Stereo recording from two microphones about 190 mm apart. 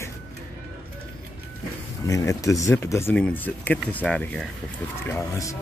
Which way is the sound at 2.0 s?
15° left (ahead or behind).